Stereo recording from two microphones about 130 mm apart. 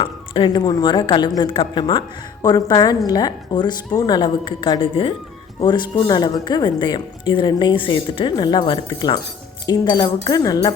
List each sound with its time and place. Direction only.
0.0 s speech: 40° left (ahead or behind)